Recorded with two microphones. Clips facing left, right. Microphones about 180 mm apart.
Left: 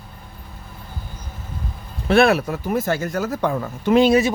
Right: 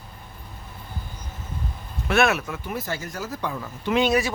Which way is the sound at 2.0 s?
30° left (ahead or behind).